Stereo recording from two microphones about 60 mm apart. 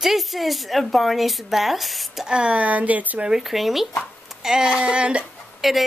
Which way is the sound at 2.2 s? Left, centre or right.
Centre.